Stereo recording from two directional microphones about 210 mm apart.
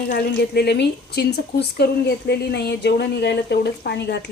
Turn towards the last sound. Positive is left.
turn(degrees=50)  # may be behind; listen again after turning